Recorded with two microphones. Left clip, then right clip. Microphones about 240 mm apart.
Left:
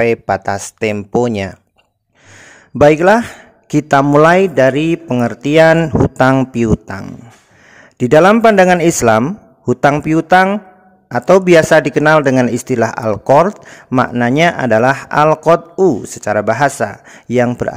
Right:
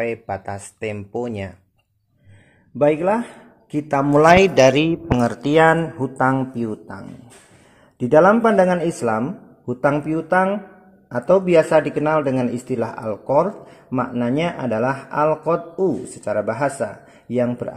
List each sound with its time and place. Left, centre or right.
0.0 s a man's voice: left
2.8 s a man's voice: left